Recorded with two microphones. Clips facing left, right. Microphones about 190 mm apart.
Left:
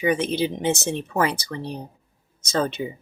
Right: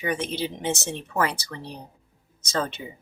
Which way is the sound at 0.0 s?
15° left (ahead or behind).